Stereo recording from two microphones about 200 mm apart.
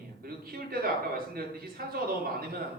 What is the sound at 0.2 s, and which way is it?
A man's voice, 50° right (ahead or behind).